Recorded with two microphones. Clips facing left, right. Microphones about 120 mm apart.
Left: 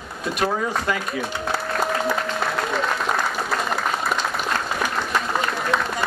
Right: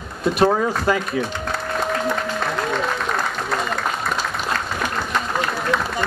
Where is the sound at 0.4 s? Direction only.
35° right (ahead or behind).